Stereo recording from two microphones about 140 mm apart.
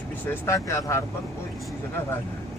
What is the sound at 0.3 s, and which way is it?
Speech, 20° left (ahead or behind).